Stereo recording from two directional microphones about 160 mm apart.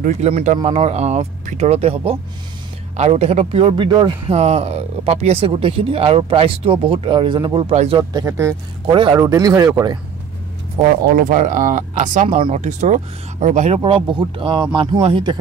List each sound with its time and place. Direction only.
0.0 s speech: 45° right (ahead or behind); by 4.1 s 30° right (ahead or behind)
4.3 s speech: 40° right (ahead or behind)
7.7 s speech: 45° right (ahead or behind)
8.0 s speech: 25° right (ahead or behind)
8.8 s speech: 30° right (ahead or behind)
11.1 s speech: 55° right (ahead or behind)
13.7 s speech: 30° right (ahead or behind)